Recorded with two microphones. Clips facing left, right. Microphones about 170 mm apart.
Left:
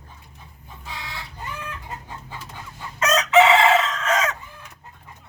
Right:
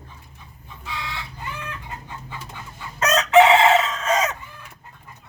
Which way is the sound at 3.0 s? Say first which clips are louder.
Right 2 dB; 30° right (ahead or behind).